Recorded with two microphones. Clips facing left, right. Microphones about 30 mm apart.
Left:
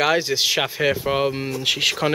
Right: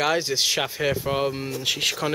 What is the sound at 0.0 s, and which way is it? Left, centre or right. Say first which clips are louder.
Speech: left 3 dB; centre.